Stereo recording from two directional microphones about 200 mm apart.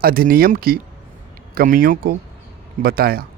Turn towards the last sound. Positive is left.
turn(degrees=-50)  # may be behind; listen again after turning